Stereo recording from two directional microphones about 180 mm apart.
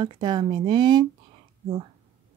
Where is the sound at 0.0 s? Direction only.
25° right (ahead or behind).